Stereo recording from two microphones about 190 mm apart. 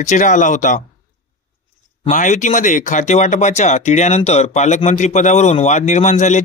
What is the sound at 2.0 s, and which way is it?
Speech, 40° left (ahead or behind).